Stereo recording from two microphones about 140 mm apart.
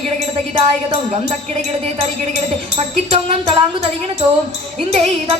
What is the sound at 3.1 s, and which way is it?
Music, 40° right (ahead or behind).